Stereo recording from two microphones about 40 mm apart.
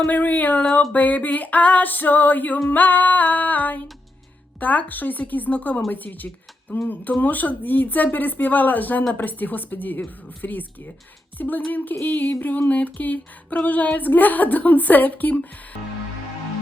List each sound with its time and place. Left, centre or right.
0.0 s a sound: left
0.9 s speech: left
7.1 s speech: left